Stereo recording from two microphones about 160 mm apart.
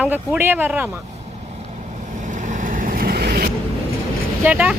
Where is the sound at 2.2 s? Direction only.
50° right (ahead or behind); by 3.4 s 75° right (ahead or behind).